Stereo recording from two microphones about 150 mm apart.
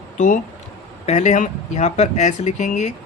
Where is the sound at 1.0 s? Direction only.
50° left (ahead or behind).